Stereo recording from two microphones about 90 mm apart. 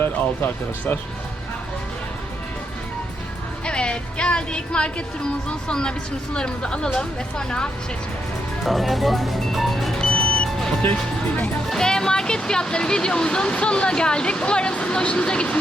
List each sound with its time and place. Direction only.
0.0 s speech: 25° left (ahead or behind)
3.7 s a woman's voice: 10° left (ahead or behind)
8.6 s music: centre (ahead or behind)
10.3 s vehicle: 10° left (ahead or behind)
11.7 s speech: 5° left (ahead or behind)